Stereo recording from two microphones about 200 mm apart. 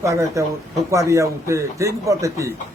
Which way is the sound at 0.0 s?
15° right (ahead or behind).